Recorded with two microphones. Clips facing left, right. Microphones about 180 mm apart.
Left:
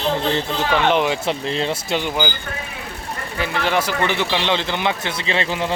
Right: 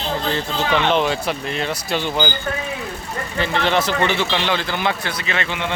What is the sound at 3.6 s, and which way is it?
Speech, 10° left (ahead or behind).